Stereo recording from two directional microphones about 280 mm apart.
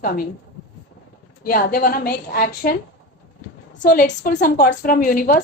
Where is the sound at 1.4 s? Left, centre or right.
Left.